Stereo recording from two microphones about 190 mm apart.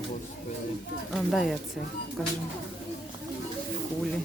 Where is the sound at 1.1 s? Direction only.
Centre (ahead or behind).